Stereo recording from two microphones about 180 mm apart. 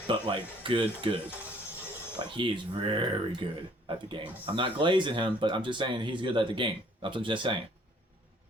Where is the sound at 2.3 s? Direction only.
25° right (ahead or behind).